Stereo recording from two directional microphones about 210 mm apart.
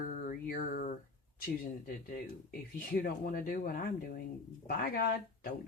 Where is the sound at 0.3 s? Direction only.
40° left (ahead or behind).